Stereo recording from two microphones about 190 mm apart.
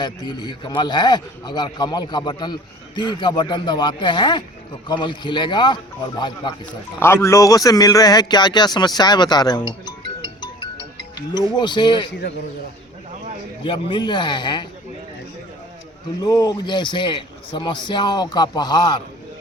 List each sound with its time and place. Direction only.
0.0 s a man's voice: 20° left (ahead or behind)
13.7 s a man's voice: 25° left (ahead or behind)
16.2 s a man's voice: 20° left (ahead or behind)